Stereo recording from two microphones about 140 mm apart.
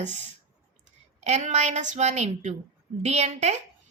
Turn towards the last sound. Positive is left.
turn(degrees=-55)  # may be behind; listen again after turning